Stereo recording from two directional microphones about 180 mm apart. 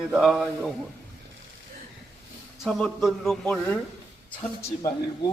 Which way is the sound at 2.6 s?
Centre (ahead or behind).